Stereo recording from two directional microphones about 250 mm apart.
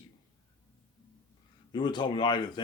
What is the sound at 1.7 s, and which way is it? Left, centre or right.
Speech, centre.